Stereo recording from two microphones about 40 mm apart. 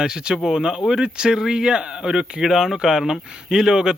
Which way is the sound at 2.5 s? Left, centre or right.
Centre.